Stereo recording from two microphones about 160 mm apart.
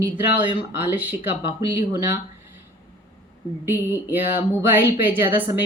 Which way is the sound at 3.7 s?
15° right (ahead or behind).